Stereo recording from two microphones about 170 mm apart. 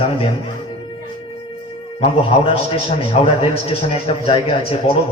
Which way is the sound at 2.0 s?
30° left (ahead or behind).